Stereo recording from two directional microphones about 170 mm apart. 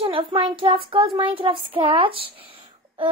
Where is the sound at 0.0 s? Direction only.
30° right (ahead or behind).